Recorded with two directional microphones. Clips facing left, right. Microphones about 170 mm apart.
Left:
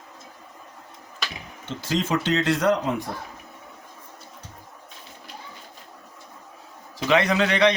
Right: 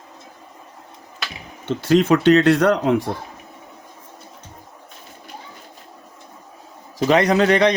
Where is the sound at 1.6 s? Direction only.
65° right (ahead or behind).